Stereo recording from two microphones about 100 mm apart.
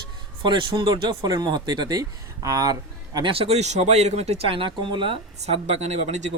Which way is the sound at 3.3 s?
80° right.